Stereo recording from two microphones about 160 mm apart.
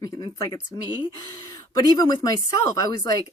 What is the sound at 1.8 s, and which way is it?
Speech, 25° left (ahead or behind).